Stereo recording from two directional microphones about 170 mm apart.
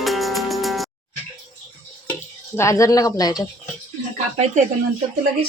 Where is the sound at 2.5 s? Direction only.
15° left (ahead or behind).